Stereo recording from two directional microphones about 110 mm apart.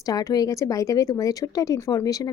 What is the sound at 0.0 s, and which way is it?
Speech, 35° left (ahead or behind).